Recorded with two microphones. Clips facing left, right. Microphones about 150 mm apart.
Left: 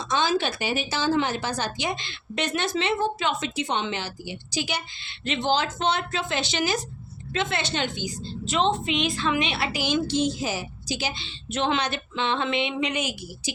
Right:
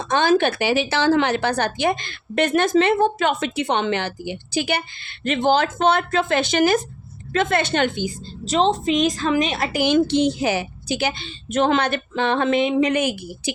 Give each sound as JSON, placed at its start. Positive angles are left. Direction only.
{"t": 0.0, "sound": "a woman's voice", "side_deg": -55}
{"t": 8.4, "sound": "a woman's voice", "side_deg": -35}